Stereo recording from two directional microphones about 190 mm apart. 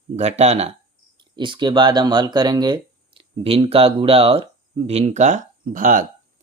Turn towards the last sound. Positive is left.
turn(degrees=-45)  # may be behind; listen again after turning